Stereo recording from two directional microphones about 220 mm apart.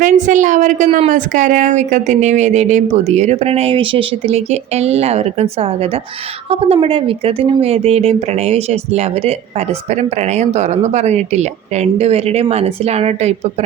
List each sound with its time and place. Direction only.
0.0 s speech: 35° right (ahead or behind)